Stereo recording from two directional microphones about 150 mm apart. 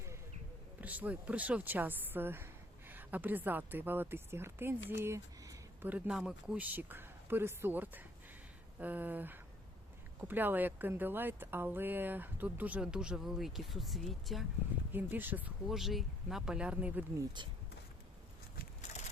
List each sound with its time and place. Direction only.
0.8 s speech: 10° right (ahead or behind)
14.9 s speech: 10° right (ahead or behind)
17.2 s speech: 30° right (ahead or behind)